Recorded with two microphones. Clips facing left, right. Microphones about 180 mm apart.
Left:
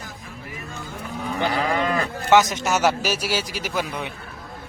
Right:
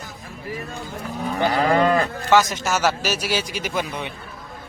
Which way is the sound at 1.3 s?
45° right (ahead or behind).